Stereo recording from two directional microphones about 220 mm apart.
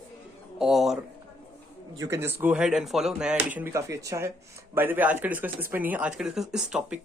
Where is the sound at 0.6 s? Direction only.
Centre (ahead or behind).